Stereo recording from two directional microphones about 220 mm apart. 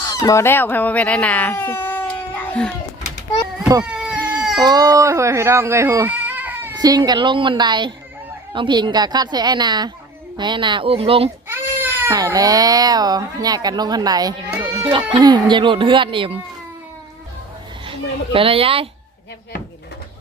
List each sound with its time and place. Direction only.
0.1 s speech: 15° left (ahead or behind)
3.8 s cat: 5° right (ahead or behind)
4.2 s baby cry: 15° right (ahead or behind)
4.5 s a woman's voice: 20° right (ahead or behind)
11.4 s speech: 10° right (ahead or behind)
18.3 s a woman's voice: 25° right (ahead or behind)